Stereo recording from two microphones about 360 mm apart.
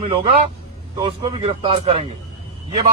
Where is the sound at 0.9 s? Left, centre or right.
Centre.